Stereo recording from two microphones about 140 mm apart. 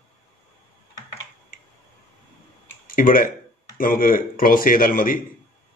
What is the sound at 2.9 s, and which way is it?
Speech, 85° left.